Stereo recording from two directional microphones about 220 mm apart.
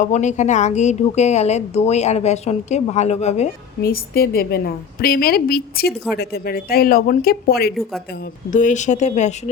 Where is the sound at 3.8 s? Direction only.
45° left (ahead or behind).